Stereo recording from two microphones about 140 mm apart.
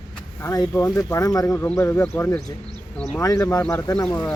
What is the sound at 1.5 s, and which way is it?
Speech, 15° left (ahead or behind).